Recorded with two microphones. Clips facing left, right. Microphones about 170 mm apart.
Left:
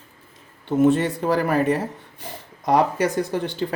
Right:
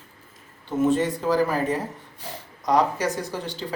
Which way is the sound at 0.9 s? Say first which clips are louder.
Even; 65° left (ahead or behind).